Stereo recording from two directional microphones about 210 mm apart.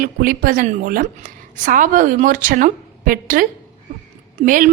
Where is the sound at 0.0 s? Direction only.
45° right (ahead or behind).